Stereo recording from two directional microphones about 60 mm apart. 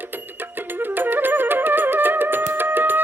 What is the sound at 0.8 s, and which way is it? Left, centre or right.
Music, right.